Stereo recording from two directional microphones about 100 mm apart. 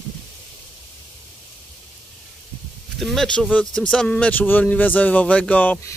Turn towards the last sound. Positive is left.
turn(degrees=15)  # may be behind; listen again after turning